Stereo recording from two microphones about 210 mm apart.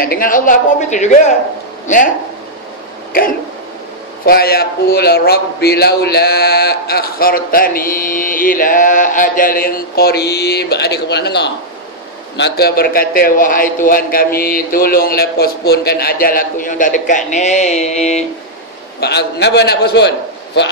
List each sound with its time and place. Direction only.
0.0 s a woman's voice: 45° left (ahead or behind)
4.3 s a man's voice: 45° left (ahead or behind); by 18.2 s 30° left (ahead or behind)
18.9 s a man's voice: 50° left (ahead or behind)